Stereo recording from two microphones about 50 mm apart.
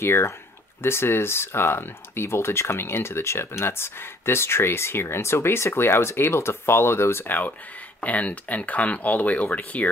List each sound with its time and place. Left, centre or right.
0.0 s speech: left
7.2 s speech: left